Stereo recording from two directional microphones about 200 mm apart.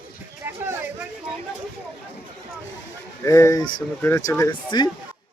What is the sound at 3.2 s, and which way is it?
Speech, 15° left (ahead or behind).